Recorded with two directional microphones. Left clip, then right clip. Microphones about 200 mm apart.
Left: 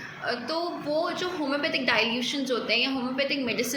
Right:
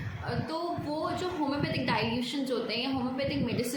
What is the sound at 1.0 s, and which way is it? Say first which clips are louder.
A woman's voice: left 2 dB; 10° right (ahead or behind).